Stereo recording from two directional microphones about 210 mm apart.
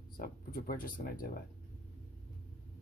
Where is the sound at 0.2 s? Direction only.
45° left (ahead or behind).